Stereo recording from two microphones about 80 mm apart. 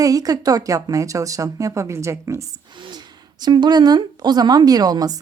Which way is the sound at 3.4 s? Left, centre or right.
Right.